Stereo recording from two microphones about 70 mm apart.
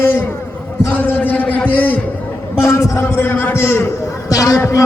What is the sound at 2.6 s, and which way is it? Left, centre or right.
A man's voice, left.